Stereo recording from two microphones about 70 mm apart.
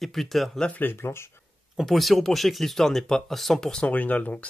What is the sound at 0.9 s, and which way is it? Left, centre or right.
Speech, left.